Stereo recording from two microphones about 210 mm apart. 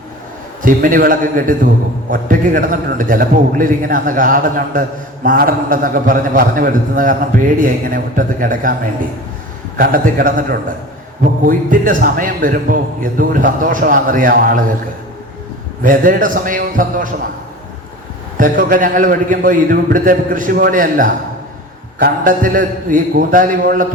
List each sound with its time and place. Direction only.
0.6 s a man's voice: 40° right (ahead or behind)
9.7 s a man's voice: 40° right (ahead or behind)
15.8 s a man's voice: 40° right (ahead or behind)
18.3 s a man's voice: 40° right (ahead or behind)